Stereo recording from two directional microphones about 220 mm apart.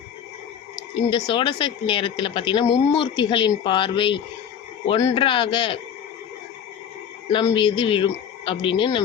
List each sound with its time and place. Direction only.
0.9 s speech: 20° left (ahead or behind)
7.3 s speech: 20° left (ahead or behind)